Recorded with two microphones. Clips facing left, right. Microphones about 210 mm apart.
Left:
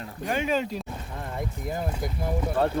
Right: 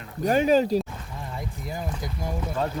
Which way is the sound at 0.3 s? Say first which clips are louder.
Right 7 dB; 40° right (ahead or behind).